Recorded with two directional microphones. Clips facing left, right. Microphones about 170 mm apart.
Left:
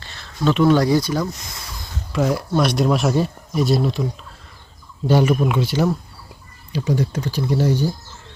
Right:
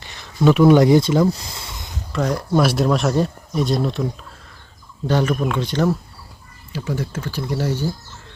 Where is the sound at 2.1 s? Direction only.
5° left (ahead or behind).